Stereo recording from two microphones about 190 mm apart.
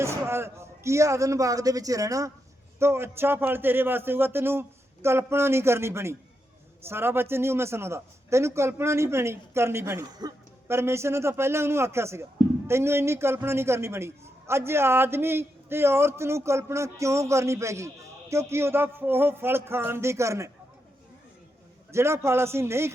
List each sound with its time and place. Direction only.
0.0 s a man's voice: 15° right (ahead or behind)
21.9 s a man's voice: 15° right (ahead or behind)